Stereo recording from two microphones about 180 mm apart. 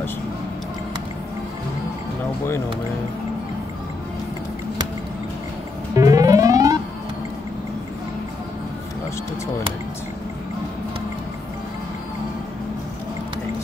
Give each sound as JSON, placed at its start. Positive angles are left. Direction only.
{"t": 5.9, "sound": "music", "side_deg": -20}